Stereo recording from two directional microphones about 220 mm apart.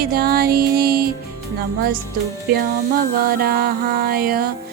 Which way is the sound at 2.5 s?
40° right (ahead or behind).